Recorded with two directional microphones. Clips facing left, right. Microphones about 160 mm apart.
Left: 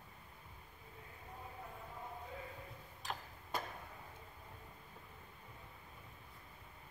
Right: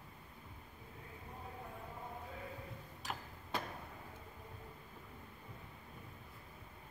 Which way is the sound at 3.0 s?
Centre (ahead or behind).